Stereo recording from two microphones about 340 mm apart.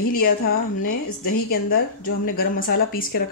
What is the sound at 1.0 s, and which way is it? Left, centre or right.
Speech, left.